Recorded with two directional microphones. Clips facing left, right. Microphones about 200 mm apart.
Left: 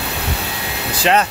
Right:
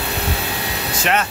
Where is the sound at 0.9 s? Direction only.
35° left (ahead or behind).